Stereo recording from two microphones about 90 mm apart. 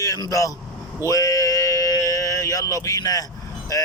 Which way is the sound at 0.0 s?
40° left (ahead or behind).